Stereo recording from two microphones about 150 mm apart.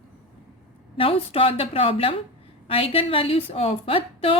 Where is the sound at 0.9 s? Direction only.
40° left (ahead or behind).